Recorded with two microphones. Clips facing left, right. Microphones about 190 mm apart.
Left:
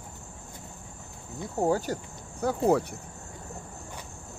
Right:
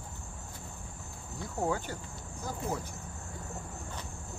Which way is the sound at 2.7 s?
70° left (ahead or behind).